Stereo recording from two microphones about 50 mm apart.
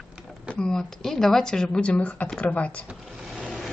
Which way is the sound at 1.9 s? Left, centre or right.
Left.